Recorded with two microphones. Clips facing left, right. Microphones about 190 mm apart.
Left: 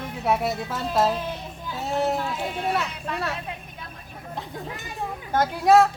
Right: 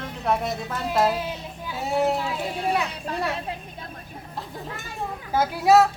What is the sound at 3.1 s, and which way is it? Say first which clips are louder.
Speech: right 2 dB; 35° right (ahead or behind).